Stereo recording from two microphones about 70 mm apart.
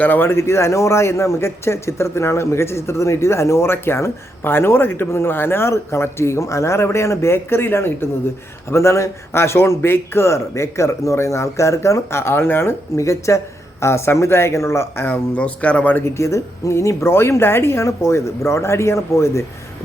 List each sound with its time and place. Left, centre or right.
0.0 s a man's voice: left
13.0 s a man's voice: left
15.1 s speech: centre
16.0 s a man's voice: left